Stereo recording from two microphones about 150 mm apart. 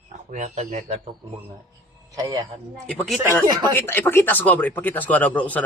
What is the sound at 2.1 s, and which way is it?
Speech, 25° right (ahead or behind).